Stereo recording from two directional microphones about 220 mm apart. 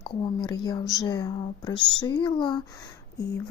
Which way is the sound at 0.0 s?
15° left (ahead or behind).